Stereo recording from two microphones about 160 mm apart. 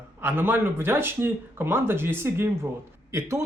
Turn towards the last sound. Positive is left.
turn(degrees=-20)  # may be behind; listen again after turning